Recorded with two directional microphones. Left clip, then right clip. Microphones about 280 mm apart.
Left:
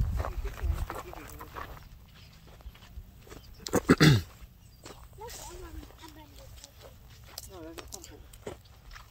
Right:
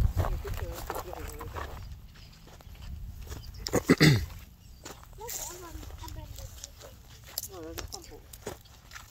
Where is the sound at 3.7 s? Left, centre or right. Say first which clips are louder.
Even; centre.